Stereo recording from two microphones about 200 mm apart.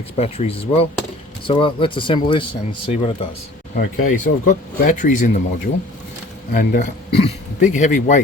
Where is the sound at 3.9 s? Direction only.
40° left (ahead or behind).